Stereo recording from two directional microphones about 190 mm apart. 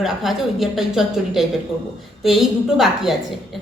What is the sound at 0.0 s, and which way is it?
A woman's voice, centre (ahead or behind).